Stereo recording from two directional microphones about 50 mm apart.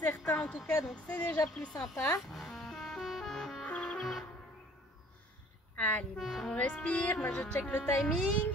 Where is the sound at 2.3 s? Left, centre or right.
Centre.